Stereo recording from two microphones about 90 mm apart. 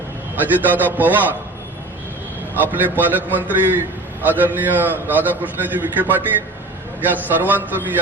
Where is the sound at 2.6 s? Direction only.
20° right (ahead or behind).